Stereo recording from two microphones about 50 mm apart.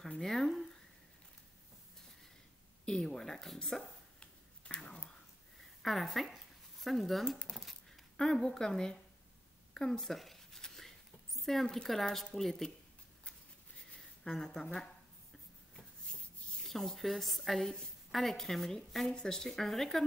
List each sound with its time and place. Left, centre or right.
0.2 s speech: centre
2.8 s speech: centre
4.2 s whispering: centre
5.8 s speech: centre
7.5 s a sound: centre
8.2 s speech: centre
9.8 s a sound: centre
11.6 s speech: centre
11.9 s a woman's voice: centre
13.9 s speech: centre
16.6 s a woman's voice: centre